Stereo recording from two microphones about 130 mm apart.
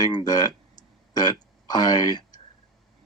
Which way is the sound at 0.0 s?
30° left (ahead or behind).